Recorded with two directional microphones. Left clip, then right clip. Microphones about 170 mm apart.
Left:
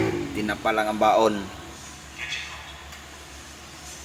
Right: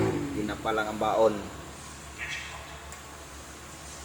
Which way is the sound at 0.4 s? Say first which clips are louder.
Left 7 dB; 30° left (ahead or behind).